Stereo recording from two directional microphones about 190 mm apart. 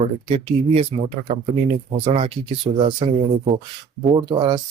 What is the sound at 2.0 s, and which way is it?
Speech, 30° right (ahead or behind).